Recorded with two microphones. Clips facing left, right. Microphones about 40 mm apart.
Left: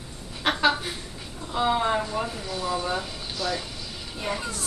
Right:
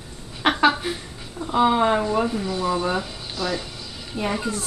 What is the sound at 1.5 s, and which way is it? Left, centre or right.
Speech, centre.